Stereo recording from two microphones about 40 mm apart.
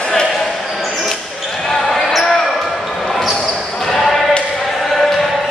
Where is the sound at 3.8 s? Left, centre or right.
Centre.